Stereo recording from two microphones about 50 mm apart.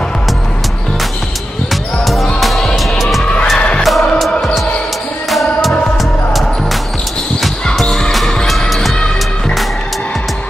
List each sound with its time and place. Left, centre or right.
2.4 s music: centre
3.5 s music: centre
3.8 s music: centre
5.3 s music: centre
7.7 s music: centre